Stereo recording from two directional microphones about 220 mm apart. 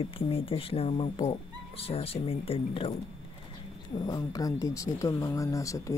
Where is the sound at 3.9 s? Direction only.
15° left (ahead or behind).